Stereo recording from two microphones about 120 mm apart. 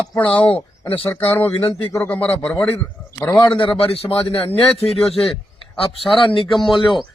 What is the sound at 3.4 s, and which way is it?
A man's voice, 45° left (ahead or behind).